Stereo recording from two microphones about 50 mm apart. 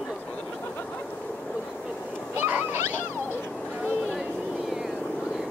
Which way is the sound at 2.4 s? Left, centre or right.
Right.